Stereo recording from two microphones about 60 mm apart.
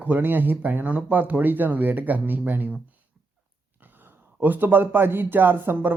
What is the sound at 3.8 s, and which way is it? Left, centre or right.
A man's voice, right.